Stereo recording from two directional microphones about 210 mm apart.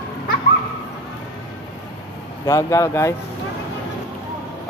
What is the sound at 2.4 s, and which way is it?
Speech, 15° left (ahead or behind).